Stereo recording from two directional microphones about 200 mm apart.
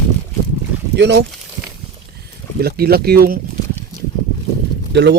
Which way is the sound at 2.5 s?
50° right (ahead or behind).